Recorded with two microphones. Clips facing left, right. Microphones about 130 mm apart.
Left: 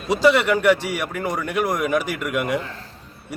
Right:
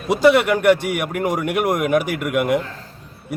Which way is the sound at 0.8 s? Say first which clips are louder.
Right 3 dB; 55° right (ahead or behind).